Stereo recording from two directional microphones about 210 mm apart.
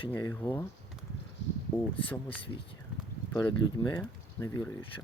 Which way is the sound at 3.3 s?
20° left (ahead or behind).